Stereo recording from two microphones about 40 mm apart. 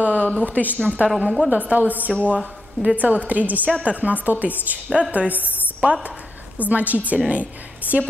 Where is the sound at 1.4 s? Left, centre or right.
Right.